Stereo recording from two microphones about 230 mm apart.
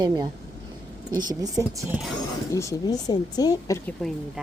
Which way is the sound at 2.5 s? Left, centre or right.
Centre.